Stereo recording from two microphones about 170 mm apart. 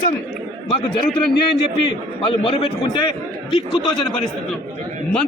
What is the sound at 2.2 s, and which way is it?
A man's voice, 30° left (ahead or behind).